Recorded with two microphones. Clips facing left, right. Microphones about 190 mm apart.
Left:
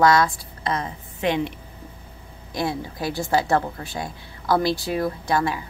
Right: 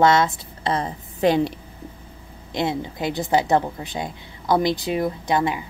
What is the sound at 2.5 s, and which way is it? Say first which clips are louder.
A woman's voice: right 2 dB; 20° right (ahead or behind).